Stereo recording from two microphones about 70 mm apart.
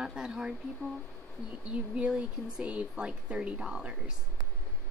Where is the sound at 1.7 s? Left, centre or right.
Centre.